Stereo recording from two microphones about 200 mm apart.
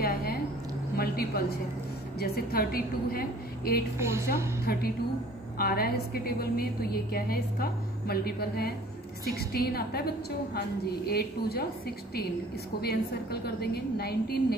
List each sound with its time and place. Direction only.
0.0 s a sound: 50° left (ahead or behind)
0.9 s a woman's voice: 50° left (ahead or behind)
4.0 s a woman's voice: 15° right (ahead or behind)
4.7 s a woman's voice: 50° left (ahead or behind)
12.8 s a woman's voice: 55° left (ahead or behind)